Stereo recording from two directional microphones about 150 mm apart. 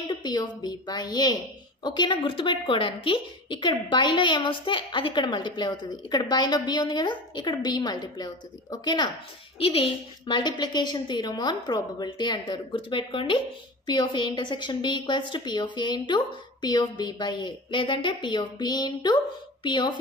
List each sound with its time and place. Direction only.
0.0 s a woman's voice: 30° left (ahead or behind)